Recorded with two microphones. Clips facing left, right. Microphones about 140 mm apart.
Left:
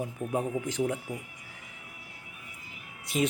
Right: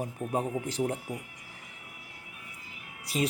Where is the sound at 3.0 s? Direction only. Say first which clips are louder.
Left 2 dB; 35° right (ahead or behind).